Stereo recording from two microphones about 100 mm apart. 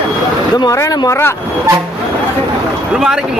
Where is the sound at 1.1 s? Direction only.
25° left (ahead or behind).